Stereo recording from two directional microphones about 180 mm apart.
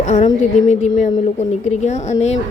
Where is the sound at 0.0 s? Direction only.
40° left (ahead or behind).